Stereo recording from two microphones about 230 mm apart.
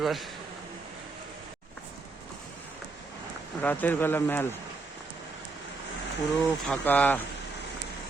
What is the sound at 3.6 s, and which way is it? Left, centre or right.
Speech, centre.